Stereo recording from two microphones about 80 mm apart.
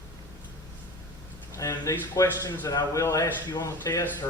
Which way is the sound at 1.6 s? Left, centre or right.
Left.